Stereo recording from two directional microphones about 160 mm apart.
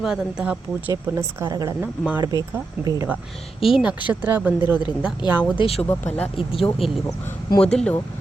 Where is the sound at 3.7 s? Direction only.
5° right (ahead or behind).